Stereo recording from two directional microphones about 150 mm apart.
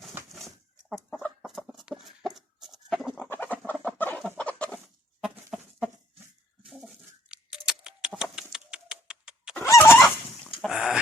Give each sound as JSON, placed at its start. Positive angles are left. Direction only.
{"t": 0.3, "sound": "bird", "side_deg": 0}
{"t": 1.2, "sound": "chicken", "side_deg": 0}
{"t": 3.2, "sound": "chicken", "side_deg": 15}
{"t": 5.2, "sound": "goat", "side_deg": -5}
{"t": 6.7, "sound": "patter", "side_deg": -5}
{"t": 8.2, "sound": "bird", "side_deg": -5}
{"t": 9.6, "sound": "fowl", "side_deg": 15}
{"t": 10.4, "sound": "a sound", "side_deg": 0}